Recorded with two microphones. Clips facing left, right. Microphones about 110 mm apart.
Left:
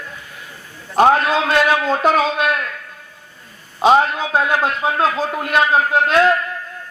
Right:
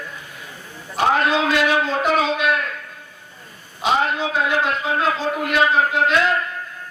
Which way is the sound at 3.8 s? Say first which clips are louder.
Left 6 dB; 45° left (ahead or behind).